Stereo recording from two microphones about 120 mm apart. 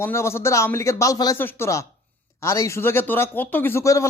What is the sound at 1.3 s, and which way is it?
Speech, 20° left (ahead or behind).